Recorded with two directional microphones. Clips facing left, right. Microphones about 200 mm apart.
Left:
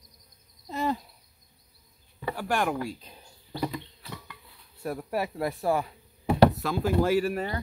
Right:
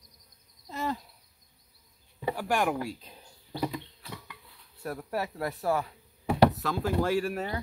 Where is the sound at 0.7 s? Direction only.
20° left (ahead or behind).